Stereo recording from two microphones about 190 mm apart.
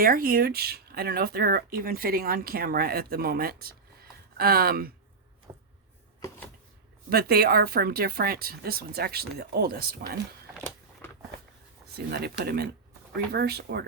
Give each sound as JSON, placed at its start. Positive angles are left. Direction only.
{"t": 0.0, "sound": "speech", "side_deg": -50}
{"t": 5.5, "sound": "a sound", "side_deg": -20}
{"t": 6.1, "sound": "typewriter", "side_deg": 15}
{"t": 7.1, "sound": "speech", "side_deg": -55}
{"t": 11.0, "sound": "power windows", "side_deg": 10}
{"t": 11.9, "sound": "speech", "side_deg": -55}